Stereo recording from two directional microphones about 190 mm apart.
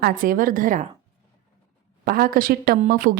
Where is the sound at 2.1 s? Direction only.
50° right (ahead or behind).